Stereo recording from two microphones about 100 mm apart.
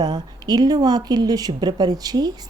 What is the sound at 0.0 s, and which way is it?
Speech, 40° right (ahead or behind).